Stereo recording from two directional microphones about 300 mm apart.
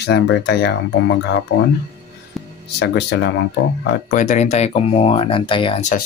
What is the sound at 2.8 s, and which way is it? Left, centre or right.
Speech, left.